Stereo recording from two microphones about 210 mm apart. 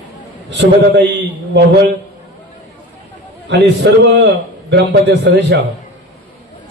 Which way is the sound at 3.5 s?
55° right (ahead or behind).